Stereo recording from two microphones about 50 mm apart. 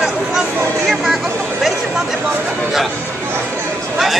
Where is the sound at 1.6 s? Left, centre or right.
Centre.